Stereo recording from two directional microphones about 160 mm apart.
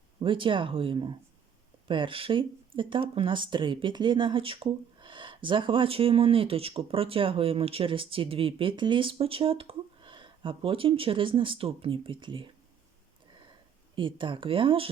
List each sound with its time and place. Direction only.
0.2 s speech: 30° right (ahead or behind)
13.9 s speech: 30° right (ahead or behind)